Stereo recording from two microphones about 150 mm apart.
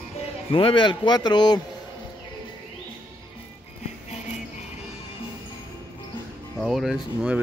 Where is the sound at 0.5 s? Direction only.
35° left (ahead or behind).